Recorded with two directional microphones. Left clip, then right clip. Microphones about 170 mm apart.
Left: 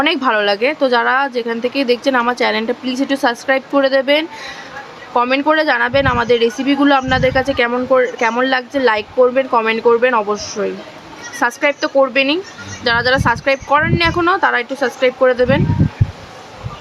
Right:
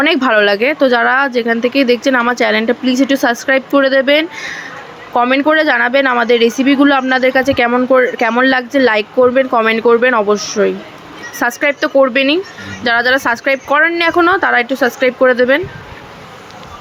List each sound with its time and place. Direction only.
0.0 s speech: 15° right (ahead or behind)